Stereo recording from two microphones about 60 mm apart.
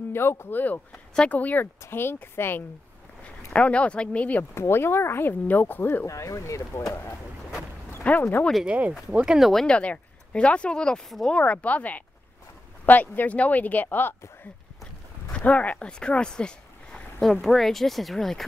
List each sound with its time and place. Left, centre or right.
0.1 s speech: left
1.8 s speech: left
3.5 s speech: left
4.6 s speech: left
5.5 s speech: left
6.0 s speech: left
8.0 s speech: left
8.6 s speech: right
9.2 s speech: centre
9.7 s speech: centre
11.1 s speech: centre
11.3 s speech: left
15.4 s speech: left
17.2 s speech: centre